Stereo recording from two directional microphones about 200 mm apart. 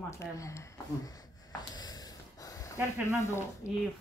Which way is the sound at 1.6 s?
20° left (ahead or behind).